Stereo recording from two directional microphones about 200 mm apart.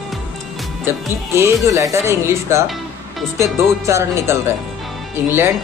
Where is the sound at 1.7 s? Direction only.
15° right (ahead or behind).